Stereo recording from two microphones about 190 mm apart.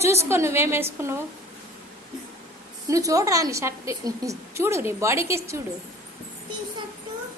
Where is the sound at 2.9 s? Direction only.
15° right (ahead or behind).